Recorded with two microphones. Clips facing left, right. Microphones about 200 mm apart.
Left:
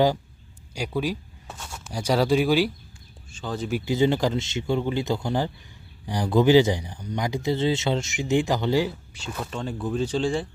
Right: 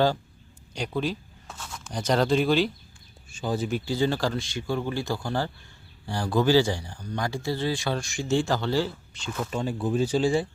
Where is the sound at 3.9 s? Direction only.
20° left (ahead or behind).